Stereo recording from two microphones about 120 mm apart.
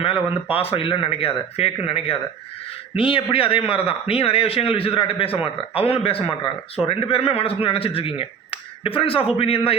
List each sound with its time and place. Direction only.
0.5 s a man's voice: 50° left (ahead or behind)